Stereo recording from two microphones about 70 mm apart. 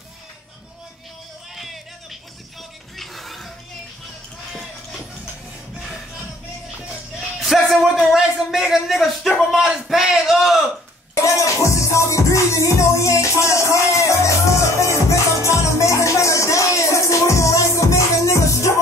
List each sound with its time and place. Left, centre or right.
1.5 s music: centre
7.2 s a man's voice: centre
11.2 s music: left